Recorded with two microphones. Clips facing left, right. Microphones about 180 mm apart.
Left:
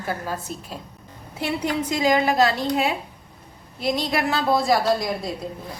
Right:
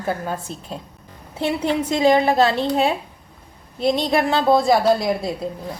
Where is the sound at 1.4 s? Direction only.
25° right (ahead or behind).